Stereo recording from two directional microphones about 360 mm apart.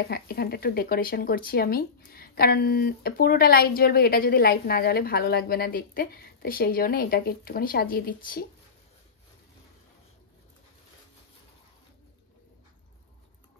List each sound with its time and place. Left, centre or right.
0.0 s speech: left